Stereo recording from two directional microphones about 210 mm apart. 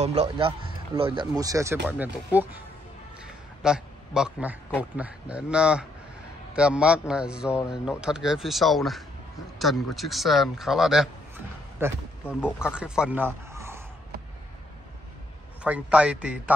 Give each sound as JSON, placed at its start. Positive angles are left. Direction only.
{"t": 0.0, "sound": "speech", "side_deg": -30}
{"t": 3.6, "sound": "a man's voice", "side_deg": -5}
{"t": 12.3, "sound": "speech", "side_deg": 10}
{"t": 12.5, "sound": "a man's voice", "side_deg": -5}
{"t": 15.6, "sound": "speech", "side_deg": -5}